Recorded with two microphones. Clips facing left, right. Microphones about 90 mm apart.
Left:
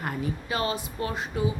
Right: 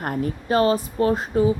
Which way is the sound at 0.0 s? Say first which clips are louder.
Right 5 dB; 50° right (ahead or behind).